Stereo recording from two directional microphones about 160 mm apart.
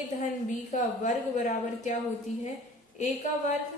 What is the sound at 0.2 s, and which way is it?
A woman's voice, 50° left (ahead or behind).